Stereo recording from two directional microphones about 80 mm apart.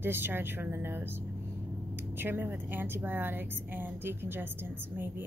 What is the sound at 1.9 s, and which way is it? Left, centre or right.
A woman's voice, right.